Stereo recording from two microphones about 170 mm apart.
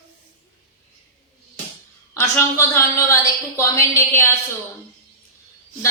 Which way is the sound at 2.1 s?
15° left (ahead or behind).